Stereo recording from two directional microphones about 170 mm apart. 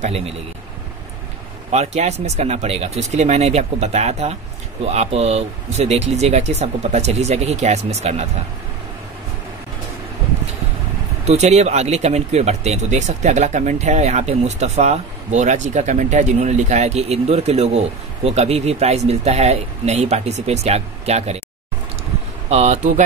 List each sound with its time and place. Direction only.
1.7 s speech: 40° right (ahead or behind)
11.2 s speech: 40° right (ahead or behind)
22.5 s speech: 40° right (ahead or behind)